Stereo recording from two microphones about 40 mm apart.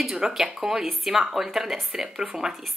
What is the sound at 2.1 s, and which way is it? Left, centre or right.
Speech, centre.